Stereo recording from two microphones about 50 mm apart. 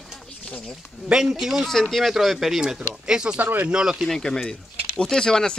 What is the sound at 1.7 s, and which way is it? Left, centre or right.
Speech, centre.